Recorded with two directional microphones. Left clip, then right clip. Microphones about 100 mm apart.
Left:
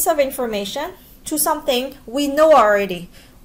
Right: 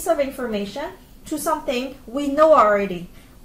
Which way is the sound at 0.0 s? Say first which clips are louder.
Left 4 dB; 15° left (ahead or behind).